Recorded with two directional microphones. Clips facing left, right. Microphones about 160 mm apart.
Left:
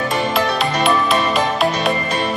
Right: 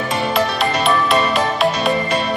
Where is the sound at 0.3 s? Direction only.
Centre (ahead or behind).